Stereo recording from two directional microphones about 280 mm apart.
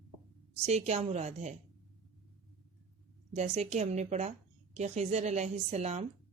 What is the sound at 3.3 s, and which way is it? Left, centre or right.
A woman's voice, right.